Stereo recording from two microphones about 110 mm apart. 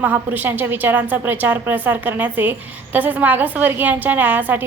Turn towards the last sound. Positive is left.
turn(degrees=-15)  # may be behind; listen again after turning